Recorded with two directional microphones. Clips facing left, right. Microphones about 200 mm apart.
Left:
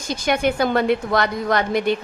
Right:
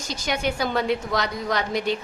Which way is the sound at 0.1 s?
55° left (ahead or behind).